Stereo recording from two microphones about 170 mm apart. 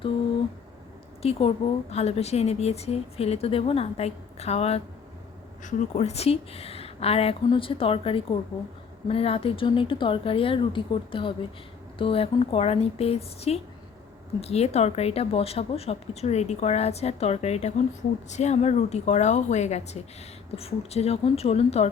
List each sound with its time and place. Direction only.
1.2 s a woman's voice: 35° left (ahead or behind)